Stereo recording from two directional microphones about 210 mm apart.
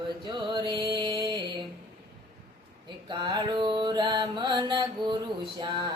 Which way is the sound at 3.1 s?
20° right (ahead or behind).